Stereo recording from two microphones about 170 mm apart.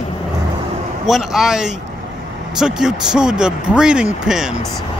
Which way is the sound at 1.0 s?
Centre (ahead or behind).